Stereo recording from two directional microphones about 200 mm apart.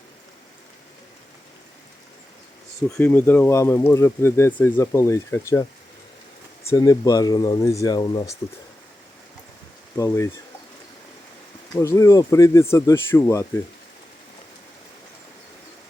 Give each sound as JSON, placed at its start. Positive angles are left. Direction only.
{"t": 2.9, "sound": "speech", "side_deg": 10}
{"t": 6.7, "sound": "speech", "side_deg": 15}
{"t": 10.0, "sound": "speech", "side_deg": 15}
{"t": 11.7, "sound": "speech", "side_deg": 15}